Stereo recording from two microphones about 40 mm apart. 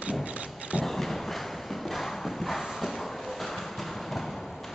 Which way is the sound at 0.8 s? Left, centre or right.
Centre.